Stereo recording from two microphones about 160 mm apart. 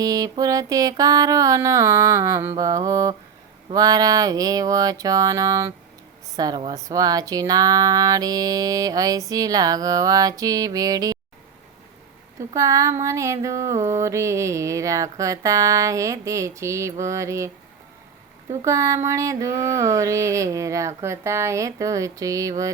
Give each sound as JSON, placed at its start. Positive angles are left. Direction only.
{"t": 0.0, "sound": "mantra", "side_deg": -20}
{"t": 6.3, "sound": "a woman's voice", "side_deg": -25}
{"t": 6.7, "sound": "mantra", "side_deg": -20}
{"t": 12.5, "sound": "mantra", "side_deg": -20}
{"t": 18.6, "sound": "mantra", "side_deg": -20}